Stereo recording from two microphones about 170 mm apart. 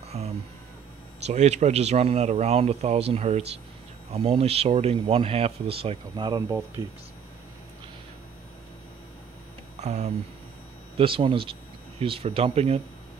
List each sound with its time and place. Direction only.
0.2 s a sound: 40° right (ahead or behind)
1.2 s speech: 40° right (ahead or behind)
9.8 s speech: 40° right (ahead or behind)
11.0 s speech: 30° right (ahead or behind)